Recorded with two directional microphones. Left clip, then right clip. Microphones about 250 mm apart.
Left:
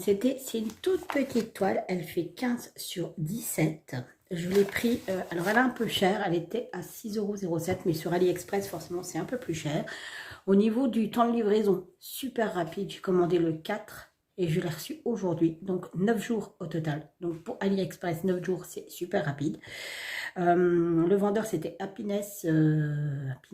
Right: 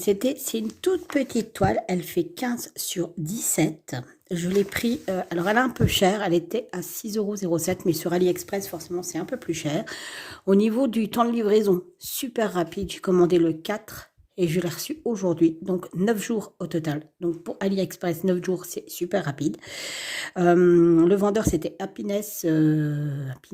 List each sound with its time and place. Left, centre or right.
0.0 s speech: right